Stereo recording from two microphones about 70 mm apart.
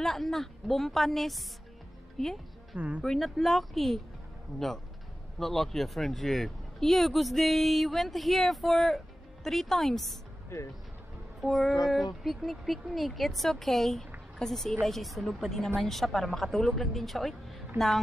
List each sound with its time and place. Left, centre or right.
0.0 s a woman's voice: centre
2.7 s speech: right
3.0 s speech: centre
5.4 s speech: centre
11.4 s speech: centre